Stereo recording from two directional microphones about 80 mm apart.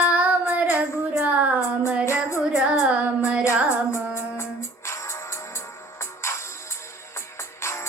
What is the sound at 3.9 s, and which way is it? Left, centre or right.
Music, left.